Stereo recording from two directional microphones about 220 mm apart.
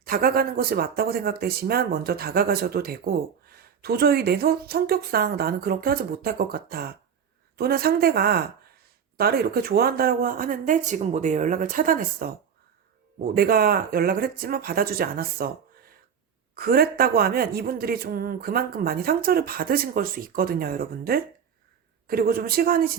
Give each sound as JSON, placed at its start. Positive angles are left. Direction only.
{"t": 0.0, "sound": "speech", "side_deg": -45}